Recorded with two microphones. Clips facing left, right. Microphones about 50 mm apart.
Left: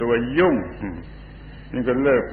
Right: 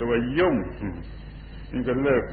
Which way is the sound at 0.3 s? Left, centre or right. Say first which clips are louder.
Left 4 dB; centre.